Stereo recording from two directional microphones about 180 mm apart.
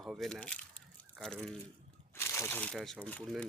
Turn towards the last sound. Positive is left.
turn(degrees=5)  # may be behind; listen again after turning